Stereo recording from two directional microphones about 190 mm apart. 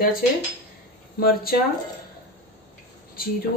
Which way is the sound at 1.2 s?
50° left (ahead or behind).